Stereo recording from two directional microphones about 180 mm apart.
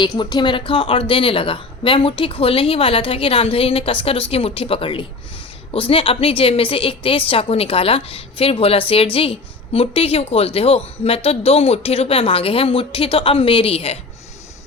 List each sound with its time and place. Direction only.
0.0 s speech: 25° left (ahead or behind)